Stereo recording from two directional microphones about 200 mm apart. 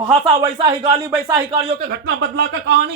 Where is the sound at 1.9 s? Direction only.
60° right (ahead or behind).